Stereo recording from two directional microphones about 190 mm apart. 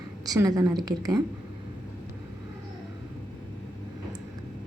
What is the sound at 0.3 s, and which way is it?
Speech, 20° right (ahead or behind).